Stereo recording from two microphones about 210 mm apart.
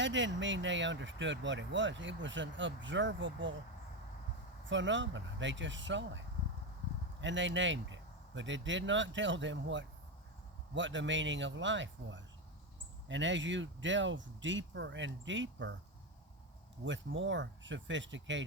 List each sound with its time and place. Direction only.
0.0 s speech: 60° right (ahead or behind)
4.6 s speech: 60° right (ahead or behind)
16.8 s speech: 60° right (ahead or behind)